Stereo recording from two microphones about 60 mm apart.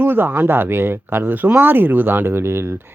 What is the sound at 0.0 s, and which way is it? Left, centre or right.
Speech, right.